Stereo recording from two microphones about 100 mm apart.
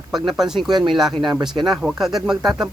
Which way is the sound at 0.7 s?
45° right (ahead or behind).